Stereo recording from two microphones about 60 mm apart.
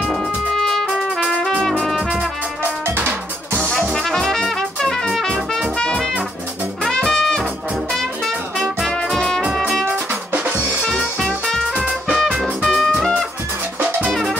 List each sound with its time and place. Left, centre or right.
0.2 s music: centre
0.8 s trumpet: centre
2.9 s drum: right
3.6 s brass instrument: centre
3.9 s trumpet: centre
5.8 s music: centre
8.5 s music: centre
10.3 s music: right
11.2 s music: centre
11.7 s music: centre
12.6 s music: centre
13.7 s music: right